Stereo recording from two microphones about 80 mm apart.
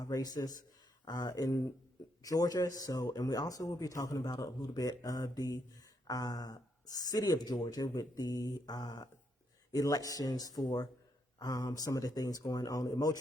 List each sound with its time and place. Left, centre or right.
0.0 s speech: left